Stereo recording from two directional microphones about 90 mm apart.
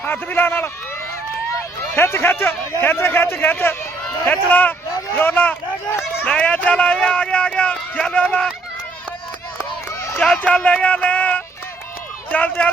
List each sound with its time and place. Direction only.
0.0 s a man's voice: 20° left (ahead or behind)
2.0 s a man's voice: 25° left (ahead or behind)
10.2 s speech: 10° left (ahead or behind)